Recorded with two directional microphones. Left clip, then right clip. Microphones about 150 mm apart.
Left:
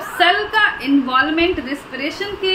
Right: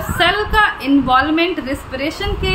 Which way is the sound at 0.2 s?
35° right (ahead or behind).